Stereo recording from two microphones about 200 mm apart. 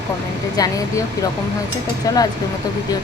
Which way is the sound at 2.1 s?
20° left (ahead or behind).